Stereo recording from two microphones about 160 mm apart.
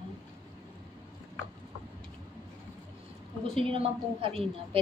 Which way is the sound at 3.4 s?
35° right (ahead or behind).